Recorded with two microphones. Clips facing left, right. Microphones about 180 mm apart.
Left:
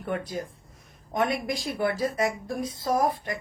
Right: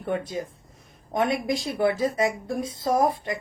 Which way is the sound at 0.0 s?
25° right (ahead or behind).